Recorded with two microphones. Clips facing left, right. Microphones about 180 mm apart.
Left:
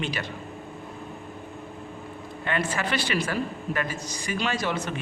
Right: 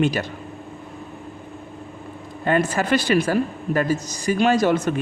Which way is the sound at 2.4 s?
45° right (ahead or behind).